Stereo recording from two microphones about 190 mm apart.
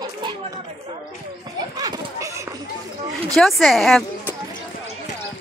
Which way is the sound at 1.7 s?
20° right (ahead or behind).